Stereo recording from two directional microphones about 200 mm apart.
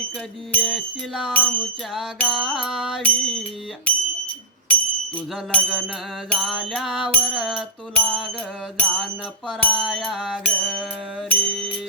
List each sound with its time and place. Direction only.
0.5 s music: centre (ahead or behind)
4.7 s music: 5° left (ahead or behind)